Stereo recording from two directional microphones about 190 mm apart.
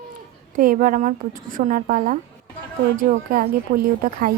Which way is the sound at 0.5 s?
45° right (ahead or behind).